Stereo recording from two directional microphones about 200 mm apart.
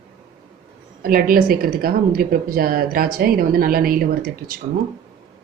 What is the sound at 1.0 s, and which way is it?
A woman's voice, 45° right (ahead or behind).